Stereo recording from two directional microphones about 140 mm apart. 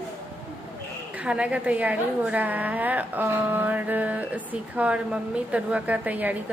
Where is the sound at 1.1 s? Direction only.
5° right (ahead or behind).